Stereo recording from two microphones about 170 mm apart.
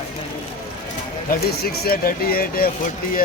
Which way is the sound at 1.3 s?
65° left (ahead or behind).